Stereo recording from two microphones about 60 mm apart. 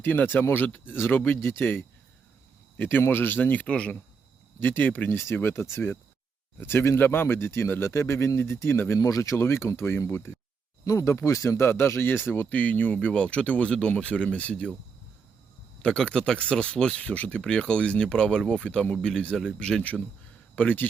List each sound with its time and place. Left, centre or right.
0.0 s speech: left
3.7 s speech: centre
4.6 s speech: left
5.1 s speech: left
9.0 s speech: left
9.4 s speech: left
11.6 s speech: left; by 14.7 s centre
15.8 s speech: centre
20.6 s speech: left